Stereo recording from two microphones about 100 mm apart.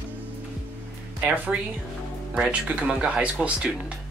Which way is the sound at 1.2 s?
15° right (ahead or behind).